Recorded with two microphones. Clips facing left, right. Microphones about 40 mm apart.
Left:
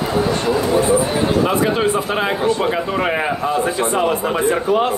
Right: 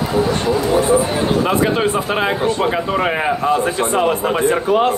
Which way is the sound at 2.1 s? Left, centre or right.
Right.